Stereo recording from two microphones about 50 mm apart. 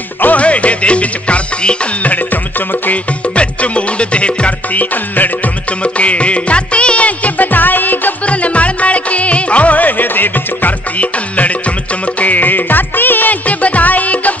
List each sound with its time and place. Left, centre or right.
0.2 s music: left
3.3 s music: left
8.3 s music: left